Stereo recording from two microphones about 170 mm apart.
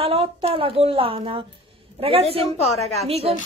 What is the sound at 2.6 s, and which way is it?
Speech, 40° left (ahead or behind).